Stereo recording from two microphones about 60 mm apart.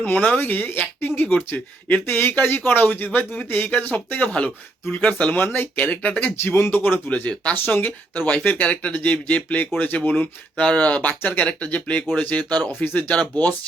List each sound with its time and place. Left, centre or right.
0.0 s speech: left
6.4 s speech: left
7.1 s speech: left
7.5 s speech: left